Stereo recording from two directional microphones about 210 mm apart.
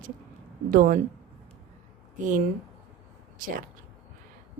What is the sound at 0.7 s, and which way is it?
Speech, 45° right (ahead or behind).